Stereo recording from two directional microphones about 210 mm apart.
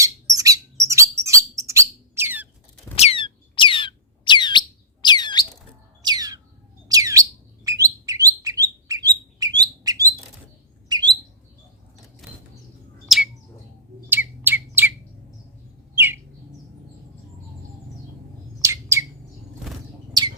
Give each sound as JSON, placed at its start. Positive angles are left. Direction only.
{"t": 0.0, "sound": "bird", "side_deg": -15}
{"t": 2.9, "sound": "squeak", "side_deg": 30}
{"t": 5.0, "sound": "a sound", "side_deg": 20}
{"t": 6.0, "sound": "bird", "side_deg": -20}
{"t": 13.1, "sound": "bird", "side_deg": 0}
{"t": 16.0, "sound": "bird", "side_deg": -10}
{"t": 18.6, "sound": "bird", "side_deg": -15}